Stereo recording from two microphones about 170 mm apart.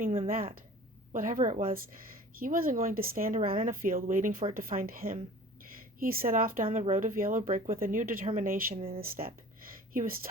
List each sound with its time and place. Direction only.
0.3 s speech: 55° right (ahead or behind)